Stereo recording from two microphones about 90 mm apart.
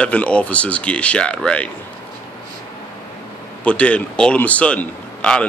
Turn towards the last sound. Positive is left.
turn(degrees=10)  # may be behind; listen again after turning